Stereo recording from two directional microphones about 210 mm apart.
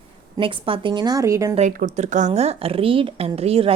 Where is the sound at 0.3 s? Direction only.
25° right (ahead or behind).